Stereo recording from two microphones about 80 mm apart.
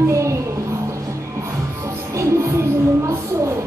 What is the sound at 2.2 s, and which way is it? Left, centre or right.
Music, right.